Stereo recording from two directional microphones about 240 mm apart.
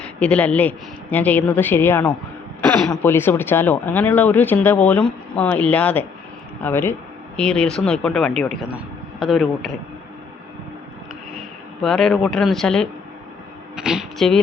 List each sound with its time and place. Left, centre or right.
0.0 s speech: centre
11.8 s speech: centre